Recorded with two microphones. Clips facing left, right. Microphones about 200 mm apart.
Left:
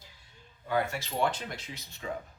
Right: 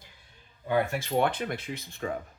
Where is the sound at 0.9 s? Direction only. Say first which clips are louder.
Right 4 dB; 55° right (ahead or behind).